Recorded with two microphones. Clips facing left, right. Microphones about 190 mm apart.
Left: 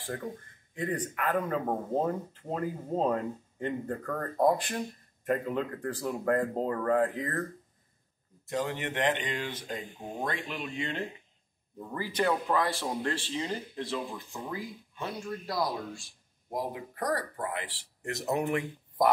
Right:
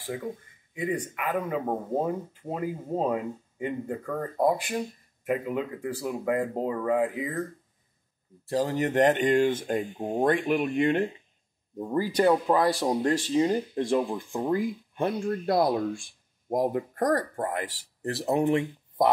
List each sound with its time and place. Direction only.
0.0 s speech: 10° right (ahead or behind)
8.5 s speech: 35° right (ahead or behind); by 11.1 s 55° right (ahead or behind)
12.0 s speech: 40° right (ahead or behind)